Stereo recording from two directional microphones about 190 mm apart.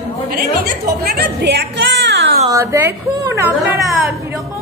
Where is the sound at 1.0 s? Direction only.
55° right (ahead or behind).